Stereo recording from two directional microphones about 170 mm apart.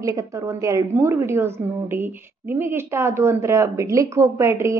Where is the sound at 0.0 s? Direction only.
20° right (ahead or behind).